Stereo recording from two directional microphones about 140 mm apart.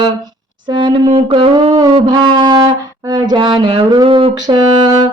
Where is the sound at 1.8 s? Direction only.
30° right (ahead or behind).